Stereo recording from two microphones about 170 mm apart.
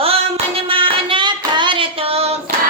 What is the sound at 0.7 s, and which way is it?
Child singing, 30° right (ahead or behind).